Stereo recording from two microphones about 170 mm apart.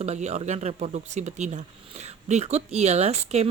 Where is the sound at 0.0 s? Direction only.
40° right (ahead or behind).